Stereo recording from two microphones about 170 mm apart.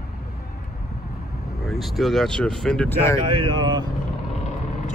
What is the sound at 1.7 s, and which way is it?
Speech, centre (ahead or behind).